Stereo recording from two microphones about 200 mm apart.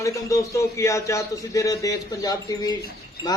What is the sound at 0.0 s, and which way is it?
A man's voice, 15° left (ahead or behind).